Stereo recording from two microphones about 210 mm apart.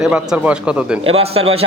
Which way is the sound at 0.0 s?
5° right (ahead or behind).